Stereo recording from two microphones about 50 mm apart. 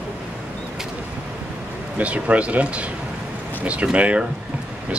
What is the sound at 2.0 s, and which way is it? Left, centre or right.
Speech, right.